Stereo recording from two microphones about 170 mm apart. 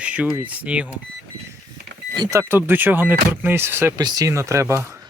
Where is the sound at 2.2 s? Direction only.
15° right (ahead or behind).